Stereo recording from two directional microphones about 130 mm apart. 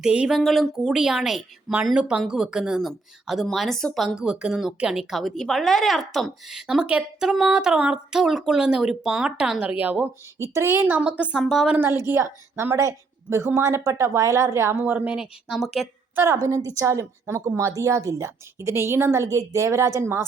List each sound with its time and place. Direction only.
0.0 s a woman's voice: 5° right (ahead or behind)
11.8 s a woman's voice: 20° right (ahead or behind); by 15.9 s 5° right (ahead or behind)
16.1 s a woman's voice: 25° right (ahead or behind)